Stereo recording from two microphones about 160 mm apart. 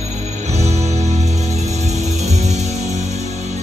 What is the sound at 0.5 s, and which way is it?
Music, 45° right (ahead or behind).